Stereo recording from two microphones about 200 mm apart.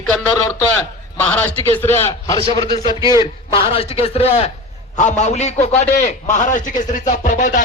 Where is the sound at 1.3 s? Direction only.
10° left (ahead or behind).